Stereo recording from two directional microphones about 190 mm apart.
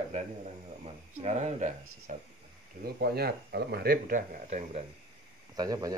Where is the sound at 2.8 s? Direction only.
55° right (ahead or behind); by 4.8 s 35° right (ahead or behind).